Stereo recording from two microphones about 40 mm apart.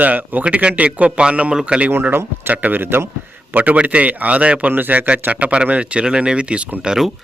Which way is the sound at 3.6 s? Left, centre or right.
Right.